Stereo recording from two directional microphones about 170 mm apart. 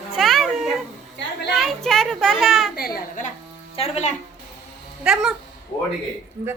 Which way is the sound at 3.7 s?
35° left (ahead or behind).